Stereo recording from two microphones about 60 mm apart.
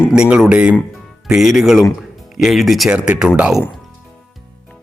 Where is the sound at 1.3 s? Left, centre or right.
Centre.